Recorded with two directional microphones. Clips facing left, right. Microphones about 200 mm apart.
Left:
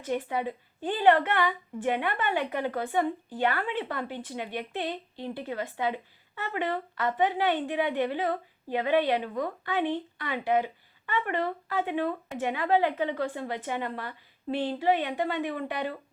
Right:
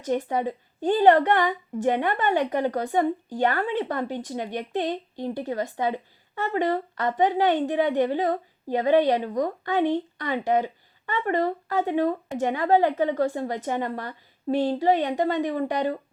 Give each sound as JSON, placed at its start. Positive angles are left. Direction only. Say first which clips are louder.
{"t": 0.0, "sound": "a woman's voice", "louder": "right 5 dB", "side_deg": -45}